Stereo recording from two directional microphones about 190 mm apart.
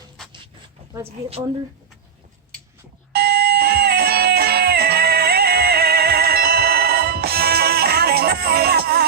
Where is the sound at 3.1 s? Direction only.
55° right (ahead or behind).